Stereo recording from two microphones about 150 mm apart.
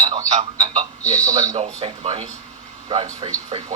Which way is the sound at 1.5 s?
45° right (ahead or behind).